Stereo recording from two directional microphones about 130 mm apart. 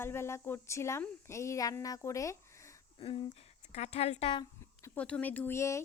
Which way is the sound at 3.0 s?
40° left (ahead or behind).